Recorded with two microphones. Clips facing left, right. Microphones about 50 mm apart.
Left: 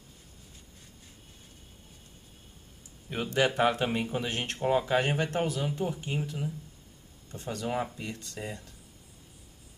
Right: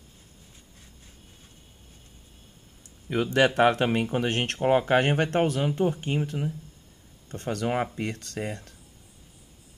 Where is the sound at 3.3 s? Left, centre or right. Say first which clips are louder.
Right 5 dB; right.